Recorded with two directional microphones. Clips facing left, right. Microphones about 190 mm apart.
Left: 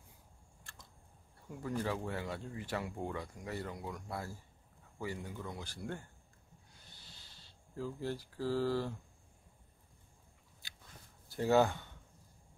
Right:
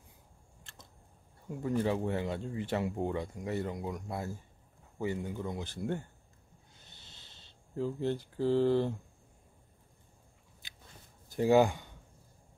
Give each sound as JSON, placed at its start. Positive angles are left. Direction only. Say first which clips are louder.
{"t": 1.6, "sound": "speech", "louder": "right 6 dB", "side_deg": -25}
{"t": 7.0, "sound": "a sound", "louder": "right 2 dB", "side_deg": -20}
{"t": 11.2, "sound": "speech", "louder": "right 4 dB", "side_deg": -15}